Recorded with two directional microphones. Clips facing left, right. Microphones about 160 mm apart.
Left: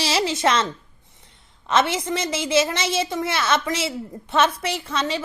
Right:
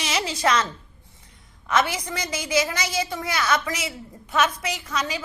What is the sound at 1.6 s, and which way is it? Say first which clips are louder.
A woman's voice: left 3 dB; 25° left (ahead or behind).